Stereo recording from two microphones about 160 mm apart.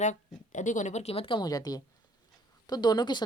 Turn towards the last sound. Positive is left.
turn(degrees=25)  # may be behind; listen again after turning